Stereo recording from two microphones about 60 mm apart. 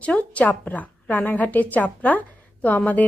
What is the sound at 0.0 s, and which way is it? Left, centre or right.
A woman's voice, left.